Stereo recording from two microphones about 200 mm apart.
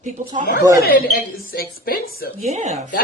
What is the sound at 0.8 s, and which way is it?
Speech, 50° left (ahead or behind).